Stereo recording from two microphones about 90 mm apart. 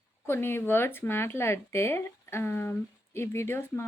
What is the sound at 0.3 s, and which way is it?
A woman's voice, 25° left (ahead or behind).